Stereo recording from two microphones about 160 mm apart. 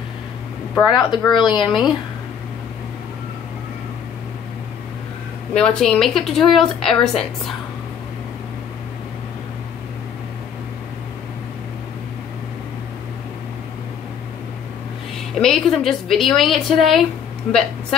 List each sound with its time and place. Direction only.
0.9 s speech: 25° left (ahead or behind)
1.6 s a woman's voice: centre (ahead or behind)
5.5 s a woman's voice: 5° left (ahead or behind)
15.3 s a woman's voice: centre (ahead or behind)